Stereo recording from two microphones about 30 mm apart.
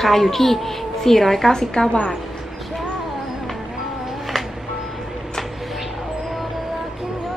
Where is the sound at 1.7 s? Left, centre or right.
Left.